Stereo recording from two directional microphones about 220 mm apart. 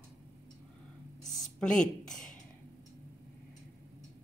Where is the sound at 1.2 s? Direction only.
Centre (ahead or behind).